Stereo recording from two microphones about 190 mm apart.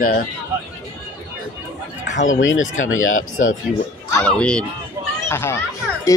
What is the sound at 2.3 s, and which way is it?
Speech, 90° left.